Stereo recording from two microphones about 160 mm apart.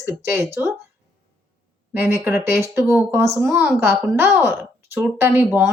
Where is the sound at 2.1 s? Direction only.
10° right (ahead or behind).